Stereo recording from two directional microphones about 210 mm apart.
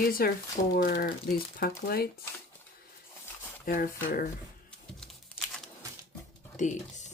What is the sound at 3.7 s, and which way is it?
Speech, 40° left (ahead or behind).